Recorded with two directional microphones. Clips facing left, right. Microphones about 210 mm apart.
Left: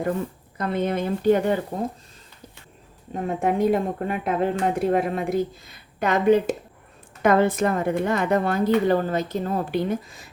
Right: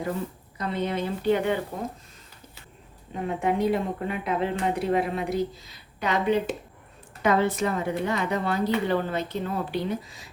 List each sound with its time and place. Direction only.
0.5 s speech: 50° left (ahead or behind)
3.2 s speech: 45° left (ahead or behind)